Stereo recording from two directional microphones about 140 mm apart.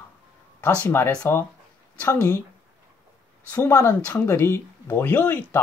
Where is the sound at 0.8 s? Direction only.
15° left (ahead or behind).